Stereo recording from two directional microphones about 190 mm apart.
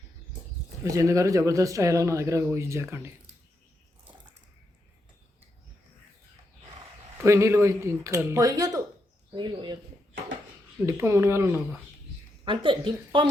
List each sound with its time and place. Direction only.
0.9 s speech: 15° right (ahead or behind)
7.2 s speech: 15° right (ahead or behind)
10.8 s speech: 15° right (ahead or behind)
12.5 s speech: 25° right (ahead or behind)